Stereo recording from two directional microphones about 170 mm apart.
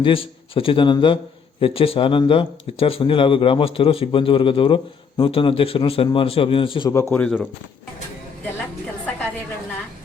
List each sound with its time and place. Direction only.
0.0 s a man's voice: 30° left (ahead or behind)
6.9 s speech: 15° left (ahead or behind)